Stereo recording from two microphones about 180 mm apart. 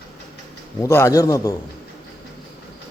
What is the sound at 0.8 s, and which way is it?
Speech, 15° left (ahead or behind).